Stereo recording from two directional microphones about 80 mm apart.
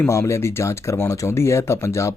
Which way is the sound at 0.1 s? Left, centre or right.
Left.